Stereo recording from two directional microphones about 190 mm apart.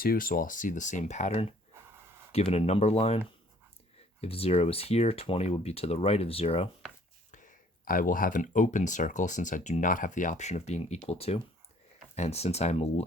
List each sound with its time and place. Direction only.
0.0 s speech: 50° left (ahead or behind); by 6.7 s 30° left (ahead or behind)
7.3 s speech: 45° left (ahead or behind)